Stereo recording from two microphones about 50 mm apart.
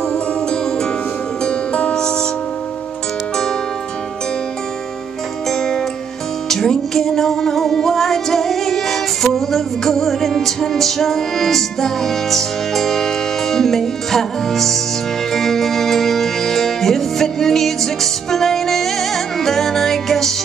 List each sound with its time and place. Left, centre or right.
1.4 s music: left
5.5 s music: centre